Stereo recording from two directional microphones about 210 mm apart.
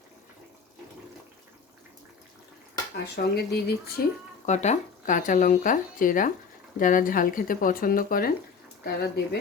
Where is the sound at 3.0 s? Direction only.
50° left (ahead or behind).